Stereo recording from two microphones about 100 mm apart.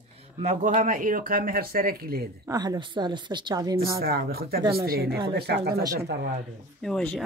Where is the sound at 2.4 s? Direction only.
40° right (ahead or behind).